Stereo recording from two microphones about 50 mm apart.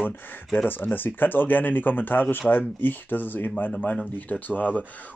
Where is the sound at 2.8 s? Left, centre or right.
Left.